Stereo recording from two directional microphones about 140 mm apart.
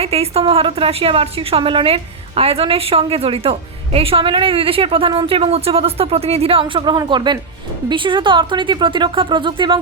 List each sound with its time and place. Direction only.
0.0 s a woman's voice: 45° right (ahead or behind)